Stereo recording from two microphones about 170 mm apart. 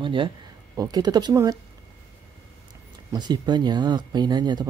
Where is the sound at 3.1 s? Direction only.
25° right (ahead or behind).